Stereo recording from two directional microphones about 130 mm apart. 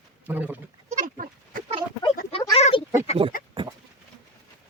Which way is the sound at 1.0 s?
90° right.